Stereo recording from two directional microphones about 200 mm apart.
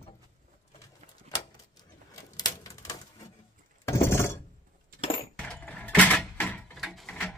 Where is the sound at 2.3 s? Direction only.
20° left (ahead or behind).